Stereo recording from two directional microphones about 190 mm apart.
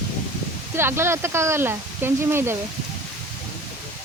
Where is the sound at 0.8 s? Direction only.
15° right (ahead or behind).